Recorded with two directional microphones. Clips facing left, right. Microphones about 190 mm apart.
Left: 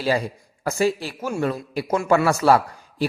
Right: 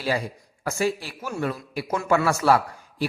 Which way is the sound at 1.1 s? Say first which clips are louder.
Left 4 dB; 45° left (ahead or behind).